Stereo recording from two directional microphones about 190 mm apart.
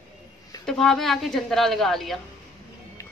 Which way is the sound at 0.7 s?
Centre (ahead or behind).